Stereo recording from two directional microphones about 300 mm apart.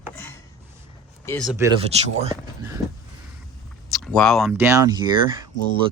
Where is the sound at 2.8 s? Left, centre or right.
Centre.